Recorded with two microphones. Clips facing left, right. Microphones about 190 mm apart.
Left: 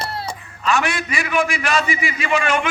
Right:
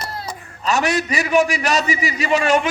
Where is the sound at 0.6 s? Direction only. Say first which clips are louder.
Right 2 dB; 40° right (ahead or behind).